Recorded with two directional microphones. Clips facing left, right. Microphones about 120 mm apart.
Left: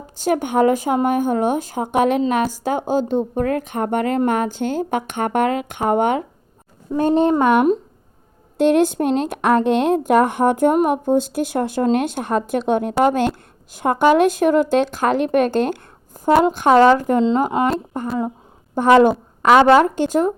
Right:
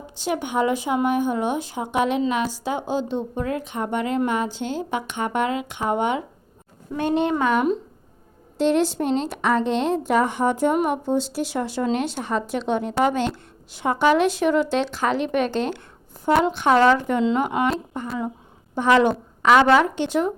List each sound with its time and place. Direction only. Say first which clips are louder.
0.2 s a woman's voice: left 6 dB; 45° left (ahead or behind)
6.9 s speech: left 6 dB; 35° left (ahead or behind)
7.4 s a woman's voice: left 5 dB; 50° left (ahead or behind)